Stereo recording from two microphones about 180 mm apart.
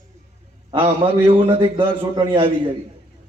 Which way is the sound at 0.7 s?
30° right (ahead or behind).